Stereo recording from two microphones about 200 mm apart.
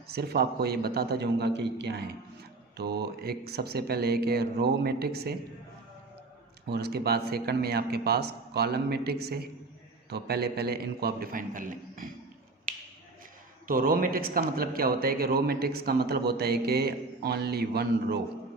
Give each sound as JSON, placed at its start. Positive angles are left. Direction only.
{"t": 0.1, "sound": "a man's voice", "side_deg": -50}
{"t": 6.7, "sound": "a man's voice", "side_deg": -55}
{"t": 13.7, "sound": "a man's voice", "side_deg": -45}